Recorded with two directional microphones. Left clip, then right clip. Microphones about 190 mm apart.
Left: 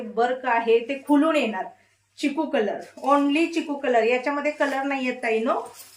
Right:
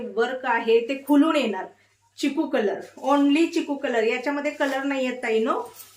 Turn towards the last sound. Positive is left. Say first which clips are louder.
# right 1 dB
turn(degrees=-10)  # may be behind; listen again after turning